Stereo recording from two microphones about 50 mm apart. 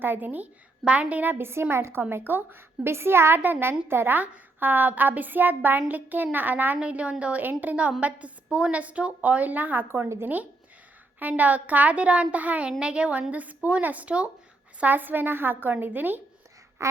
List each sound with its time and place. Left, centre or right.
0.0 s a woman's voice: right
1.7 s a woman's voice: right
2.0 s a woman's voice: right
4.2 s speech: right
6.7 s a woman's voice: right
11.2 s a woman's voice: right
14.8 s speech: right
16.8 s a sound: right